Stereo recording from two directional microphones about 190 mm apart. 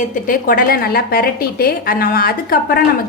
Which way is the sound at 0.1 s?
45° left (ahead or behind).